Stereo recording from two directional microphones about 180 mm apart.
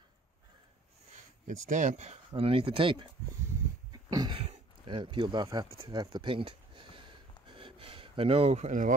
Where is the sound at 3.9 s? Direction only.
20° right (ahead or behind).